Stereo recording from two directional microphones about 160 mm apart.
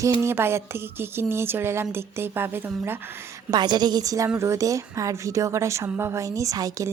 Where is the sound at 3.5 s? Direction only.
25° right (ahead or behind).